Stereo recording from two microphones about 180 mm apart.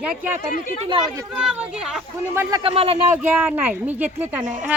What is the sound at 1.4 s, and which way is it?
Speech, 5° right (ahead or behind).